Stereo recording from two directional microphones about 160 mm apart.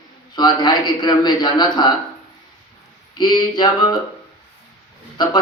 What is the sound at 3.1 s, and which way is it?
Speech, 30° left (ahead or behind).